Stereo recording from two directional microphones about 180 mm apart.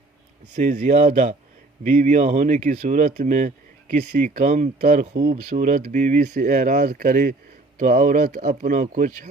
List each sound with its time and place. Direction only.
0.5 s speech: 45° right (ahead or behind)
5.4 s speech: 45° right (ahead or behind)